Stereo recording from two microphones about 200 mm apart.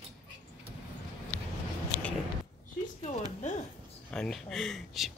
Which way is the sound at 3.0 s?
35° left (ahead or behind).